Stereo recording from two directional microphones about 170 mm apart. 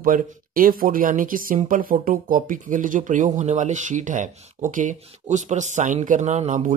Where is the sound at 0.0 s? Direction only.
55° right (ahead or behind).